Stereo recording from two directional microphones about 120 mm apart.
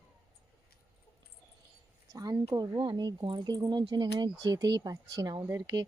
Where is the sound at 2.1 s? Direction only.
35° right (ahead or behind).